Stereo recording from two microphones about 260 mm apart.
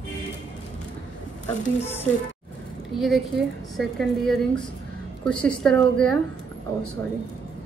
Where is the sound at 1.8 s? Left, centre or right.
Left.